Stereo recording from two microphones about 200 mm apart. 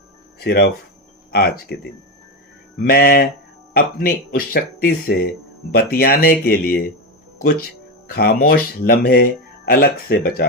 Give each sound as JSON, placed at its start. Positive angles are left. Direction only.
{"t": 0.3, "sound": "speech", "side_deg": 55}